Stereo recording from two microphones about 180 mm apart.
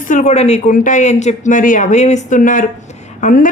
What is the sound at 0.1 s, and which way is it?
Speech, 40° left (ahead or behind).